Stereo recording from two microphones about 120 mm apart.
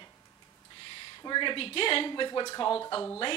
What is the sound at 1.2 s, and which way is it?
Speech, 40° left (ahead or behind).